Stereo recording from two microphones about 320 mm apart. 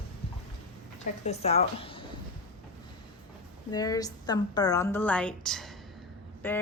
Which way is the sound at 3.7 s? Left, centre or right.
Centre.